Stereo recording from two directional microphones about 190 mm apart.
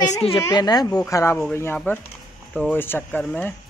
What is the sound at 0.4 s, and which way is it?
A child's voice, 20° left (ahead or behind).